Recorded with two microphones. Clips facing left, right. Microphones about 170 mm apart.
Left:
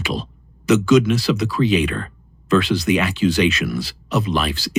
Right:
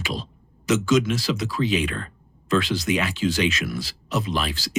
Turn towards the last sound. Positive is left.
turn(degrees=65)  # may be behind; listen again after turning